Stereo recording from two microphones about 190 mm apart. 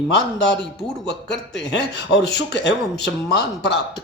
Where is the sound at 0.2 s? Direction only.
65° left (ahead or behind).